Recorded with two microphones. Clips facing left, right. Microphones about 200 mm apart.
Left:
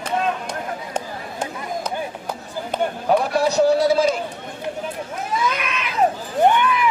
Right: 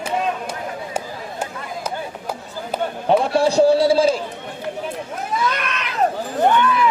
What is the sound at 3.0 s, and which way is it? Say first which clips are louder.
Run: right 3 dB; 30° right (ahead or behind).